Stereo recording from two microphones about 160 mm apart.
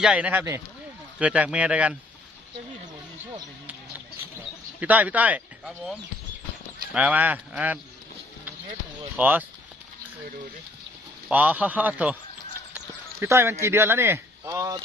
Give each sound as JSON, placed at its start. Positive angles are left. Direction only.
{"t": 0.0, "sound": "speech", "side_deg": -5}
{"t": 4.8, "sound": "speech", "side_deg": -10}
{"t": 9.1, "sound": "speech", "side_deg": -10}
{"t": 11.3, "sound": "speech", "side_deg": -10}